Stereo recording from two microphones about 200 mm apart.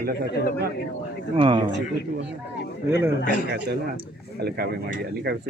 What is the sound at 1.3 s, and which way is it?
Speech, 25° right (ahead or behind).